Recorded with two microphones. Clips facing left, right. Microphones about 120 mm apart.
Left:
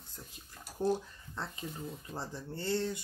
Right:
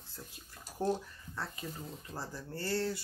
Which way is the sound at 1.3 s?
20° left (ahead or behind).